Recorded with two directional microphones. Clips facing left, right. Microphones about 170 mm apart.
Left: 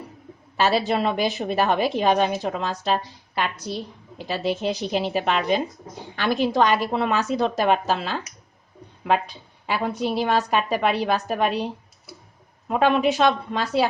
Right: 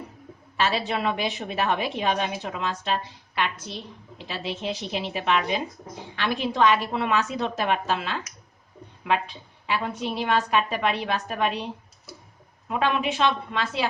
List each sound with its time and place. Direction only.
0.5 s a woman's voice: 40° left (ahead or behind)